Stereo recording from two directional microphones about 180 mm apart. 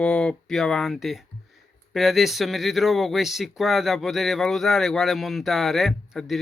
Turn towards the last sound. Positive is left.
turn(degrees=0)  # may be behind; listen again after turning